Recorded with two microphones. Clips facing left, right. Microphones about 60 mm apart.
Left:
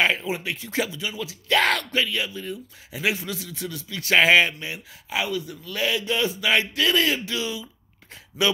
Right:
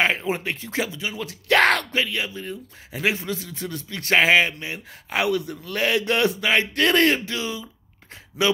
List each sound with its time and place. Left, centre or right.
0.0 s speech: right
1.2 s speech: right
1.9 s speech: right
4.2 s speech: right
5.1 s a man's voice: right
6.4 s speech: right
6.7 s speech: right
7.2 s speech: right